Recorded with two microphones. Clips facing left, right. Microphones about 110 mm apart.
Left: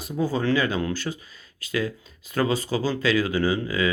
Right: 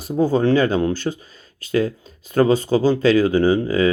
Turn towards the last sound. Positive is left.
turn(degrees=-30)  # may be behind; listen again after turning